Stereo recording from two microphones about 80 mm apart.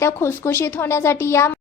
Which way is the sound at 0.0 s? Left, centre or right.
Left.